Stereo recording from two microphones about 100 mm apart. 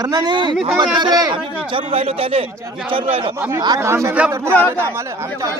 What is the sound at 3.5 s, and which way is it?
Speech, 40° right (ahead or behind).